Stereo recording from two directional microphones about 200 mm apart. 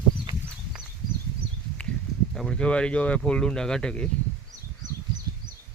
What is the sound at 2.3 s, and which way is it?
Speech, 5° left (ahead or behind).